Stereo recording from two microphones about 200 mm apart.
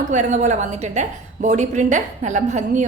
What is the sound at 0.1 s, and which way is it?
A woman's voice, 35° right (ahead or behind).